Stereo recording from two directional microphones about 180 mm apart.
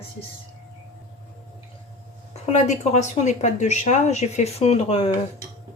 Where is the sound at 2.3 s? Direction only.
40° left (ahead or behind).